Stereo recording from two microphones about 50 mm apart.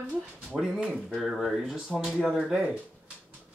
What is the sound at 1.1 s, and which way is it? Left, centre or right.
Speech, centre.